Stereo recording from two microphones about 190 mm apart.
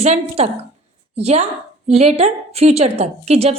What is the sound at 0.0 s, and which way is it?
A woman's voice, 35° right (ahead or behind).